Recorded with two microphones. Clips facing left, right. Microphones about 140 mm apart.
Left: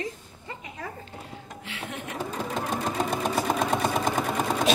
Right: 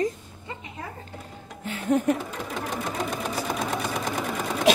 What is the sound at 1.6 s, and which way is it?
Speech, 45° right (ahead or behind).